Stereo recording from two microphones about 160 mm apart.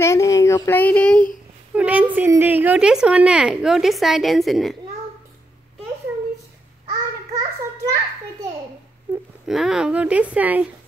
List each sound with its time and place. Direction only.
0.0 s speech: 20° left (ahead or behind)
1.8 s a woman's voice: 10° right (ahead or behind)
6.9 s a sound: 25° right (ahead or behind)
9.5 s speech: 5° right (ahead or behind)